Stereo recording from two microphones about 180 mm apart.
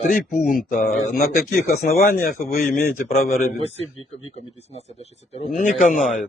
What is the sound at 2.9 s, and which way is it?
Speech, 45° left (ahead or behind).